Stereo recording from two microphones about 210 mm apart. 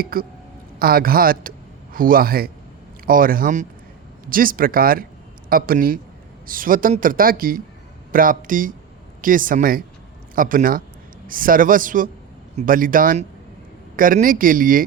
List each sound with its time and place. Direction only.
0.0 s speech: 45° right (ahead or behind)